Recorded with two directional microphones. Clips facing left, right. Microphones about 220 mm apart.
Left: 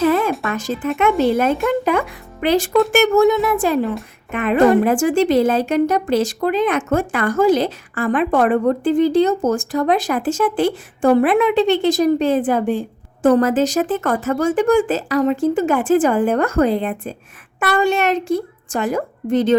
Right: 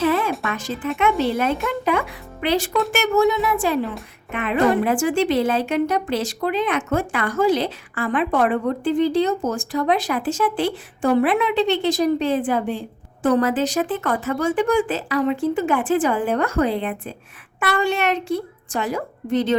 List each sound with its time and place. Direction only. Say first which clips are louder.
0.0 s music: left 4 dB; 45° left (ahead or behind)
0.5 s a woman's voice: left 4 dB; 45° left (ahead or behind)